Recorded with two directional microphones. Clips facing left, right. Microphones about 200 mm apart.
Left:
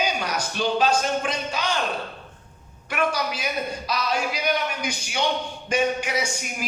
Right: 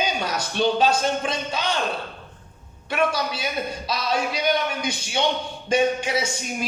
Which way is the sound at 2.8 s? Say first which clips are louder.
Right 2 dB; 25° right (ahead or behind).